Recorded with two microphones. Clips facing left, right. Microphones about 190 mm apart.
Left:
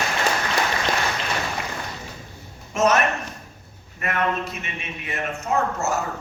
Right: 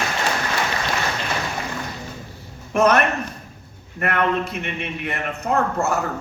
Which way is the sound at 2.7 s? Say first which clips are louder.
Right 3 dB; 60° right (ahead or behind).